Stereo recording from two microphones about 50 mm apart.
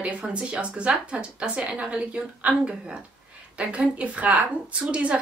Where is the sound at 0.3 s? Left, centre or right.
Right.